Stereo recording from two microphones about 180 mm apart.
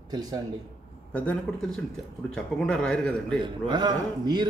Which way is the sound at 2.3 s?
5° left (ahead or behind).